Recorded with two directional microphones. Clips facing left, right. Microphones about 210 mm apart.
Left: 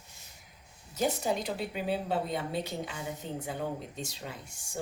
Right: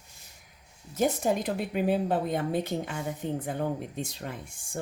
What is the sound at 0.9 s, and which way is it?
Speech, 50° right (ahead or behind).